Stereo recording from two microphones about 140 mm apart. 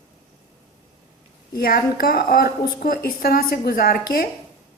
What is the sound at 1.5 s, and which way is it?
A woman's voice, 90° left.